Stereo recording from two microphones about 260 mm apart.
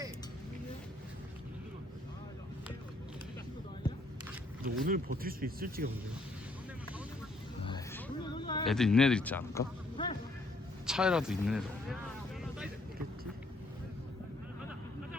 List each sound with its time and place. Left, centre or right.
4.6 s speech: right
7.9 s hubbub: centre
8.6 s speech: centre
10.0 s music: centre
10.8 s speech: centre
12.4 s boat: centre